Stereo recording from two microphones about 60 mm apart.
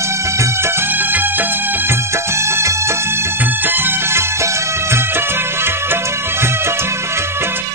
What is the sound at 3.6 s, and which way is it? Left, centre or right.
Music, right.